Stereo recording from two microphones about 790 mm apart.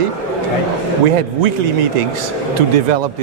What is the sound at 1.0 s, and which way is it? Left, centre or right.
Speech, right.